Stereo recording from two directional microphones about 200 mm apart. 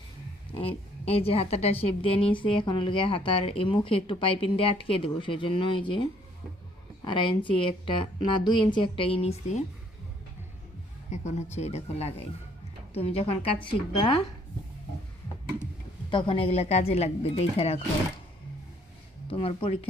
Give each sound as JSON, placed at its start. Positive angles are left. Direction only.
{"t": 0.5, "sound": "a woman's voice", "side_deg": 30}
{"t": 11.1, "sound": "a woman's voice", "side_deg": 35}
{"t": 16.0, "sound": "a woman's voice", "side_deg": 25}
{"t": 19.3, "sound": "a woman's voice", "side_deg": 30}